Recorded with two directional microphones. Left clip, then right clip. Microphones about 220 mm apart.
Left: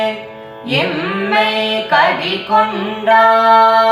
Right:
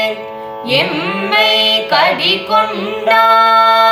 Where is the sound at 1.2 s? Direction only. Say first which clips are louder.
Right 4 dB; 40° right (ahead or behind).